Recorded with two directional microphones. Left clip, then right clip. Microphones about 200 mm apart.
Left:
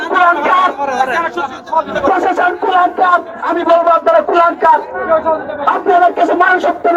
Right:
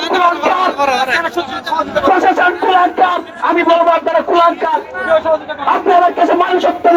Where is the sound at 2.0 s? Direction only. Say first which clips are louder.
Right 4 dB; 20° right (ahead or behind).